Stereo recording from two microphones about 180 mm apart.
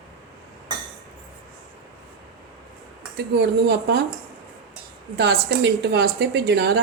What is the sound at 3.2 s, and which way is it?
Speech, 65° right (ahead or behind).